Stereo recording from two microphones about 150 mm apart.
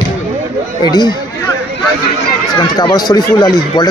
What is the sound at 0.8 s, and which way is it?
Speech, 30° left (ahead or behind).